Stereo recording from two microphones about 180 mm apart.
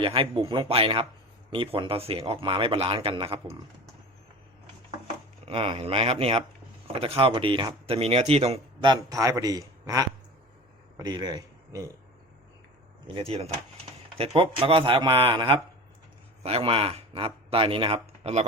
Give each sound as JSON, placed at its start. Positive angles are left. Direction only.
{"t": 0.0, "sound": "speech", "side_deg": -30}
{"t": 5.5, "sound": "a man's voice", "side_deg": -30}
{"t": 13.1, "sound": "speech", "side_deg": -35}